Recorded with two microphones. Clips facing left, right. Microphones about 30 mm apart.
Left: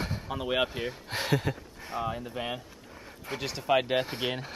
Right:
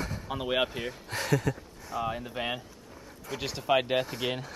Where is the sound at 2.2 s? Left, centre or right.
Centre.